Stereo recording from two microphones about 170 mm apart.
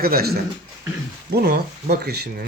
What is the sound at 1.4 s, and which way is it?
Speech, 65° right (ahead or behind).